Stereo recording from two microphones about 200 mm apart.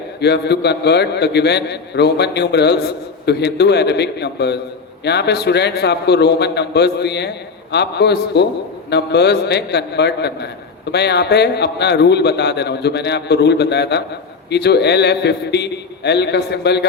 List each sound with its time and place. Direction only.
0.2 s a man's voice: 55° left (ahead or behind)